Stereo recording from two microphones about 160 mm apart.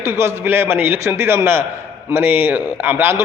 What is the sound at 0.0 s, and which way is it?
A man's voice, 15° right (ahead or behind).